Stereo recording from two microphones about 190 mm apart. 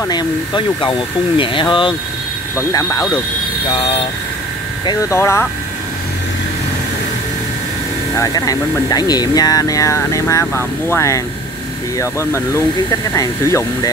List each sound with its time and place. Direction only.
0.1 s speech: 25° left (ahead or behind)
3.7 s speech: 30° left (ahead or behind)
4.8 s speech: 15° left (ahead or behind)
8.2 s speech: 20° left (ahead or behind)